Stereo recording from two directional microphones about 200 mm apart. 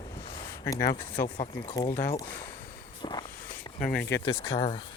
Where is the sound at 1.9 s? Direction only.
10° left (ahead or behind).